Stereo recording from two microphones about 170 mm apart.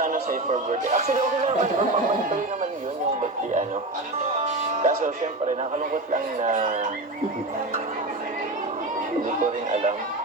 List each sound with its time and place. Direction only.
0.0 s a man's voice: 50° right (ahead or behind)
4.4 s a man's voice: 45° right (ahead or behind)
9.4 s a man's voice: 45° right (ahead or behind)